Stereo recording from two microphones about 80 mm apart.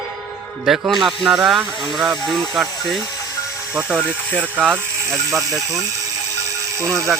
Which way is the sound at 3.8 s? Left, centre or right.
Centre.